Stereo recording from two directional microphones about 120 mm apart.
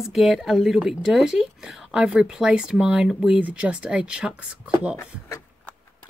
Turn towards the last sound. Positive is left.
turn(degrees=25)  # may be behind; listen again after turning